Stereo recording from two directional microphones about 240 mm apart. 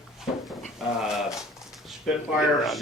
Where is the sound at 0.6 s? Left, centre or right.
Centre.